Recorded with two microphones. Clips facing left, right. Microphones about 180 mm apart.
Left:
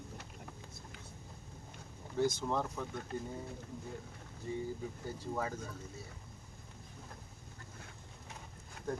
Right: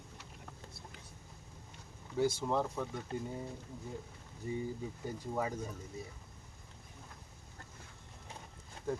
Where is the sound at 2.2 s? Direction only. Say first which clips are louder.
Right 1 dB; 10° right (ahead or behind).